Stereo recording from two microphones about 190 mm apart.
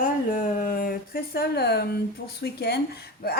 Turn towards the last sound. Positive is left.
turn(degrees=55)  # may be behind; listen again after turning